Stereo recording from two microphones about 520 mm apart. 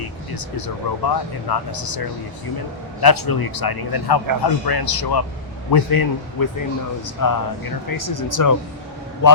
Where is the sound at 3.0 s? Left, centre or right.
Left.